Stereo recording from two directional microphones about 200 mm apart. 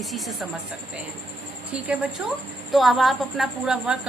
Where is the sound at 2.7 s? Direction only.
Centre (ahead or behind).